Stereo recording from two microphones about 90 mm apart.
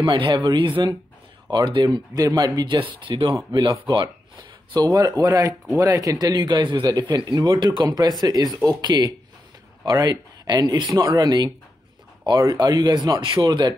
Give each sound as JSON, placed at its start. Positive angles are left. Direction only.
{"t": 0.0, "sound": "speech", "side_deg": -60}
{"t": 2.1, "sound": "speech", "side_deg": -45}
{"t": 3.3, "sound": "a man's voice", "side_deg": -50}
{"t": 3.8, "sound": "a man's voice", "side_deg": -65}
{"t": 13.2, "sound": "speech", "side_deg": -60}